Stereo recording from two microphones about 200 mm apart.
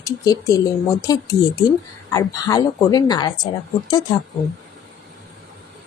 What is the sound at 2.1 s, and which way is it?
Speech, 15° left (ahead or behind).